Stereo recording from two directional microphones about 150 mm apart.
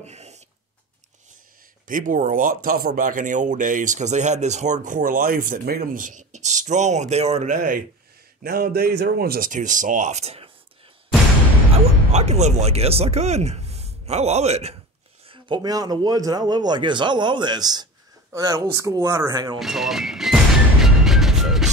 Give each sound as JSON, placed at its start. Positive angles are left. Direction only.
{"t": 0.0, "sound": "a sound", "side_deg": -45}
{"t": 1.9, "sound": "speech", "side_deg": -60}
{"t": 7.4, "sound": "speech", "side_deg": -65}
{"t": 8.4, "sound": "speech", "side_deg": -85}
{"t": 12.1, "sound": "speech", "side_deg": -45}
{"t": 15.2, "sound": "a man's voice", "side_deg": -35}
{"t": 19.6, "sound": "speech", "side_deg": 0}
{"t": 20.8, "sound": "music", "side_deg": 0}